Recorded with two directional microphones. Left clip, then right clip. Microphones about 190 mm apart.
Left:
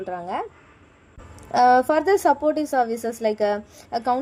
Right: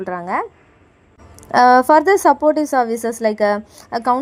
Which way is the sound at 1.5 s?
35° right (ahead or behind).